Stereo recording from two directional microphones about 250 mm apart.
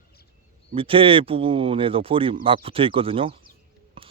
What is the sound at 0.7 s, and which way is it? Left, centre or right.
Speech, right.